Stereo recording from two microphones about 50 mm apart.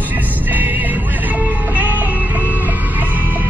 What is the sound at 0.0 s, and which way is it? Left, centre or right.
Music, right.